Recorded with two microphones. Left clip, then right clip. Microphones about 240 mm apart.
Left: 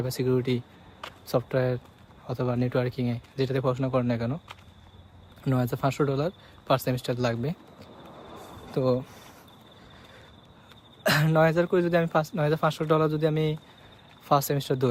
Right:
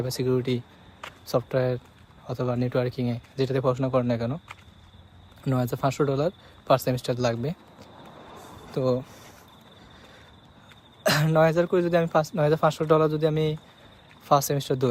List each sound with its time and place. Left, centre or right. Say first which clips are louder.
0.0 s speech: right 1 dB; centre
11.0 s speech: right 1 dB; centre